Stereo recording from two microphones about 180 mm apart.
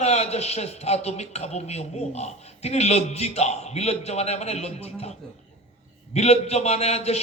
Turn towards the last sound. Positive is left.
turn(degrees=35)  # may be behind; listen again after turning